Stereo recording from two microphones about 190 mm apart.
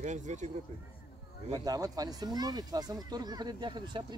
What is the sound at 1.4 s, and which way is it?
A child's voice, 20° right (ahead or behind).